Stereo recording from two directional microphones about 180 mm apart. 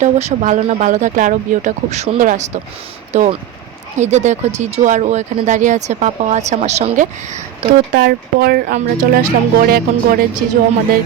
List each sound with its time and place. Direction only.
0.0 s speech: 40° right (ahead or behind)
7.9 s speech: 60° right (ahead or behind)